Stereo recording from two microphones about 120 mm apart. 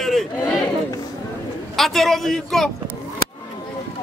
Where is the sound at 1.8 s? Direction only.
Centre (ahead or behind).